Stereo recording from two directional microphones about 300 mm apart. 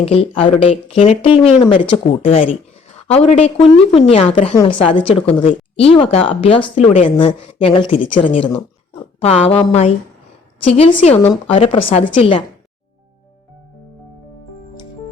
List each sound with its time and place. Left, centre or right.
0.0 s a woman's voice: centre